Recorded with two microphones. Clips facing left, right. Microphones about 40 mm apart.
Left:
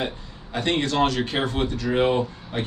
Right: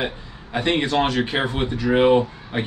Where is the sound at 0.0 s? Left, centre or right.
Centre.